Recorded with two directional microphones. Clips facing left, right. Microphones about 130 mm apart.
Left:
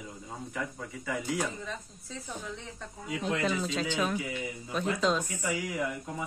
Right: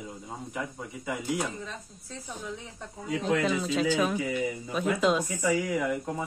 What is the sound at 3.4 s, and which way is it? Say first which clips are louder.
A woman's voice: right 4 dB; centre (ahead or behind).